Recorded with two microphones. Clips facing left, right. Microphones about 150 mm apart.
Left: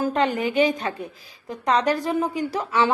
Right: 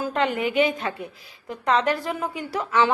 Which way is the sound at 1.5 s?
15° left (ahead or behind).